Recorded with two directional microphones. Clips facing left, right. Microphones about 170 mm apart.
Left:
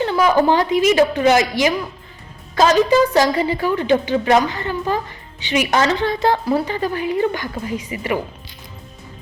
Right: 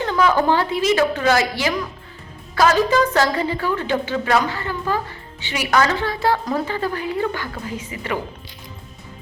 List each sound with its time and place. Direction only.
0.1 s a woman's voice: 15° left (ahead or behind)